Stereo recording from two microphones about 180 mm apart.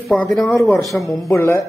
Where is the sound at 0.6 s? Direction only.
20° left (ahead or behind).